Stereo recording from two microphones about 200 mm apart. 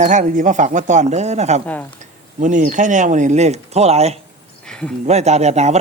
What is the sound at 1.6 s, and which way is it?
Speech, 10° left (ahead or behind).